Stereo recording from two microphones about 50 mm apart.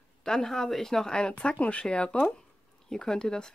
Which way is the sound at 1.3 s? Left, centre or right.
Left.